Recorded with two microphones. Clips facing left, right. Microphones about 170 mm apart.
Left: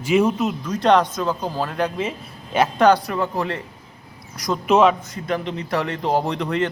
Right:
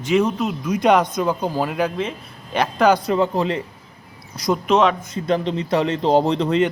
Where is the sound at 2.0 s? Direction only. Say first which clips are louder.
Even; 5° left (ahead or behind).